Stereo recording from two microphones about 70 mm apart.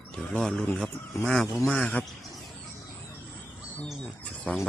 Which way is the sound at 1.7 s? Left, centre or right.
Centre.